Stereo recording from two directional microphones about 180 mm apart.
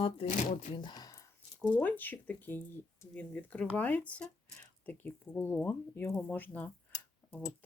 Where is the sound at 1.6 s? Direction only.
10° left (ahead or behind).